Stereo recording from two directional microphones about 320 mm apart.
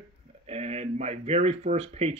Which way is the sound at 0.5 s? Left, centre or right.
Centre.